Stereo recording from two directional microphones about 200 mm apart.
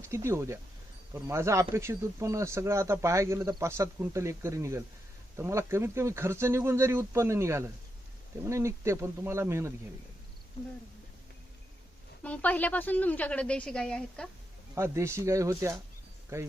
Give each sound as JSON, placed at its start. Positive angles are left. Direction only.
{"t": 0.0, "sound": "speech", "side_deg": -15}
{"t": 12.2, "sound": "a woman's voice", "side_deg": 5}
{"t": 14.8, "sound": "speech", "side_deg": -15}